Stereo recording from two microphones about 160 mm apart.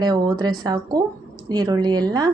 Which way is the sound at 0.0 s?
25° right (ahead or behind).